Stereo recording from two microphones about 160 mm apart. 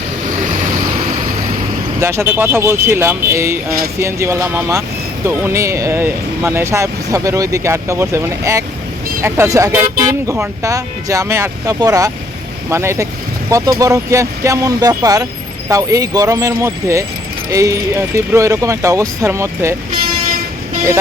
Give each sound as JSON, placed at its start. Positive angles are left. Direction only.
{"t": 2.0, "sound": "speech", "side_deg": -15}